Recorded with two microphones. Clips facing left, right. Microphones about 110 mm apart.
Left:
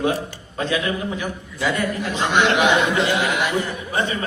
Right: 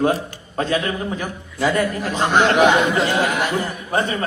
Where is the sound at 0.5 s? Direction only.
40° right (ahead or behind).